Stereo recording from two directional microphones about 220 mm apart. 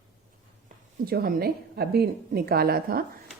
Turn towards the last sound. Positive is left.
turn(degrees=-40)  # may be behind; listen again after turning